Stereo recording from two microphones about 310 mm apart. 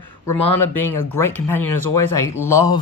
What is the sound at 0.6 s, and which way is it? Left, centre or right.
Speech, left.